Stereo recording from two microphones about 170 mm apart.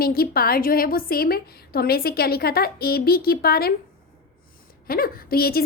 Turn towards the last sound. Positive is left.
turn(degrees=65)  # may be behind; listen again after turning